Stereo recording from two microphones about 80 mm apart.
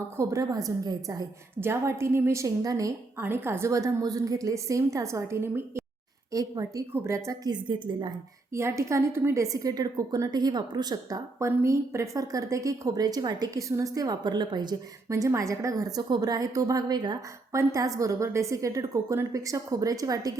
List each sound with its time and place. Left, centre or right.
0.2 s a woman's voice: right
1.6 s a woman's voice: right
3.2 s a woman's voice: right
3.7 s a woman's voice: right
6.3 s a woman's voice: right
6.9 s a woman's voice: right
7.4 s a woman's voice: right
8.5 s a woman's voice: right
11.3 s a woman's voice: right
15.1 s a woman's voice: right
16.0 s a woman's voice: right
17.2 s a woman's voice: right